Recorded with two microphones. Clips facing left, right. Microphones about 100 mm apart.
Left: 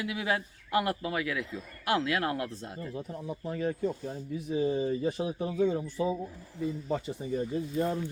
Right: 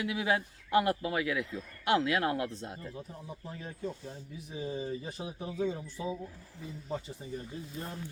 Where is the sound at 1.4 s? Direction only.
15° left (ahead or behind).